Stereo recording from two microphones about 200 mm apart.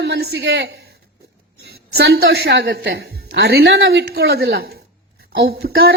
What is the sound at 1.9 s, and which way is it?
A woman's voice, 60° right (ahead or behind).